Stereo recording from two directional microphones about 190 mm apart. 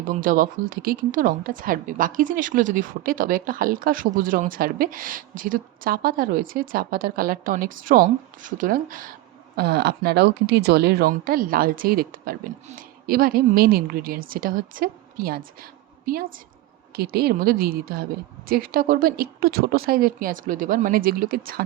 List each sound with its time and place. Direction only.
0.0 s a woman's voice: 45° right (ahead or behind)
9.6 s a woman's voice: 60° right (ahead or behind)